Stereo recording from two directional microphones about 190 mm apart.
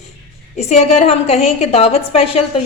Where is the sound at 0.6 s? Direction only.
35° left (ahead or behind).